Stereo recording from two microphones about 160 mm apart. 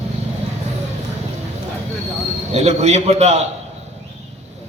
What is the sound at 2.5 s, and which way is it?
Speech, 45° right (ahead or behind).